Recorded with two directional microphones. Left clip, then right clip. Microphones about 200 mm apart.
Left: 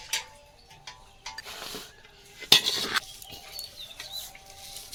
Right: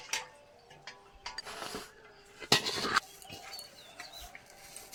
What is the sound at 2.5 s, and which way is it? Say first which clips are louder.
Cutlery: left 7 dB; centre (ahead or behind).